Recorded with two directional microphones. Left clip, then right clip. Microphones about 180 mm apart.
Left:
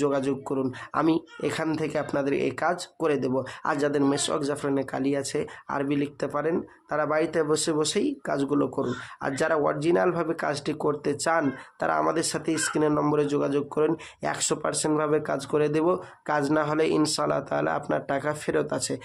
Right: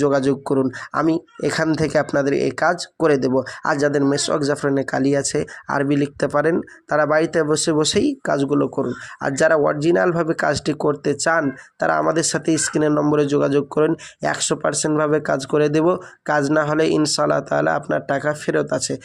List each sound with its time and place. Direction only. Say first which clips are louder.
0.0 s speech: right 8 dB; 25° right (ahead or behind)